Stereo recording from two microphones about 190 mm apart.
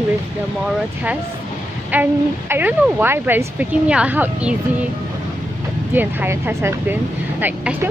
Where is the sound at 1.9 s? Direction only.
10° right (ahead or behind).